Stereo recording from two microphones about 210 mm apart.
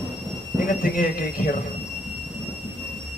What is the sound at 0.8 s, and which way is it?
Speech, 40° left (ahead or behind).